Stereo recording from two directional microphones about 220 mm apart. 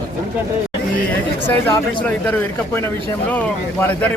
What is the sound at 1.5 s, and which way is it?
Speech, 5° left (ahead or behind).